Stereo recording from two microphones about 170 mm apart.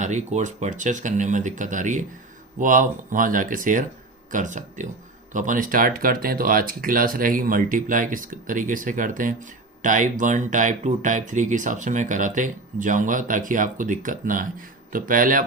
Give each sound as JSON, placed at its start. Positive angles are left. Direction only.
{"t": 0.0, "sound": "speech", "side_deg": -45}